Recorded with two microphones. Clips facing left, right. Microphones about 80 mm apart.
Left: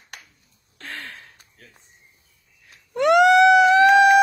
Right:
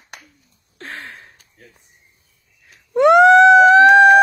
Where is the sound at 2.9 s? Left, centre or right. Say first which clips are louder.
Right 5 dB; right.